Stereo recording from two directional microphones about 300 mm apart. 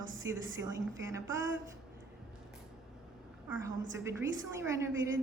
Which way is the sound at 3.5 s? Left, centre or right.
Centre.